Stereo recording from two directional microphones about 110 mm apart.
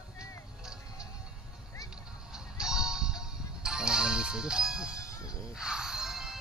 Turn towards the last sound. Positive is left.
turn(degrees=-5)  # may be behind; listen again after turning